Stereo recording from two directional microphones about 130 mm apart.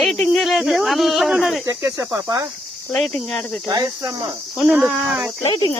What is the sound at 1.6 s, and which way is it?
Speech, 25° right (ahead or behind).